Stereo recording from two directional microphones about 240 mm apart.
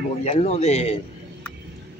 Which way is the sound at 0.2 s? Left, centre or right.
Left.